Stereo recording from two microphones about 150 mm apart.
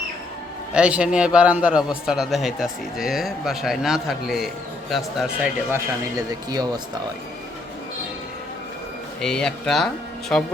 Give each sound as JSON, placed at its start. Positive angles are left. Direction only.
{"t": 0.7, "sound": "a man's voice", "side_deg": -5}
{"t": 5.7, "sound": "a man's voice", "side_deg": -25}
{"t": 9.2, "sound": "a man's voice", "side_deg": 5}